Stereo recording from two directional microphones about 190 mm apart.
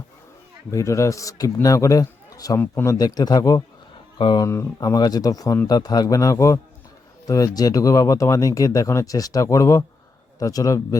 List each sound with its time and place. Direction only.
0.7 s a man's voice: 15° left (ahead or behind)